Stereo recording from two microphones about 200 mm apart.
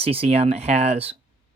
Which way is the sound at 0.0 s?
30° right (ahead or behind).